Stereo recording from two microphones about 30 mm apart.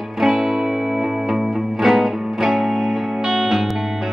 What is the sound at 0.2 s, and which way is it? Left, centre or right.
Music, centre.